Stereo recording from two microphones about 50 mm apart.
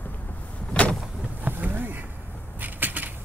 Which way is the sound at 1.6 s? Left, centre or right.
Right.